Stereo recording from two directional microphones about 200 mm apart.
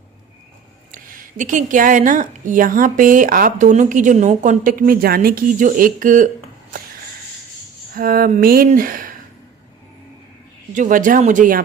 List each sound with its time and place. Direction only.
0.9 s speech: 45° right (ahead or behind)
7.9 s speech: 45° right (ahead or behind)
10.8 s speech: 40° right (ahead or behind)